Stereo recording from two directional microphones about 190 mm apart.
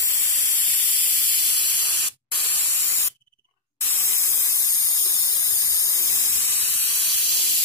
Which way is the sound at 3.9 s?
15° left (ahead or behind).